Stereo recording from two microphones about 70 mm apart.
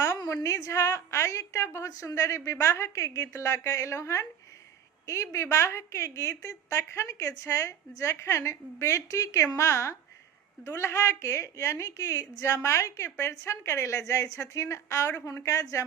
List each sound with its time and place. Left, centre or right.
0.4 s a woman's voice: left